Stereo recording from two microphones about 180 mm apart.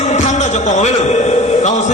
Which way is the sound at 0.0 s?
40° left (ahead or behind).